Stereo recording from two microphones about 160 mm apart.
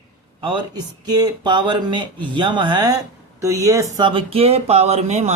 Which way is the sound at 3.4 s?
20° right (ahead or behind).